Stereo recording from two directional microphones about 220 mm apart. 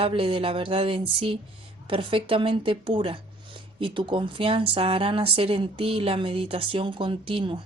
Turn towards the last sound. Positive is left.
turn(degrees=-25)  # may be behind; listen again after turning